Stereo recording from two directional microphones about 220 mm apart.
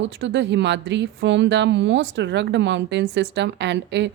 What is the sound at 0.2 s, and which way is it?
Speech, 55° right (ahead or behind).